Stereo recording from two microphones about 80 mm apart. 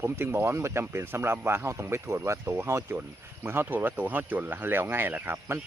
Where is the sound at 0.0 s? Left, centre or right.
Right.